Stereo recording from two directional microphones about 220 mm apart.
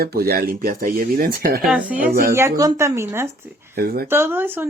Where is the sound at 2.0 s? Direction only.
40° right (ahead or behind).